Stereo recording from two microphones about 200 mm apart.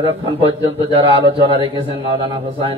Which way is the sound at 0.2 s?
25° right (ahead or behind).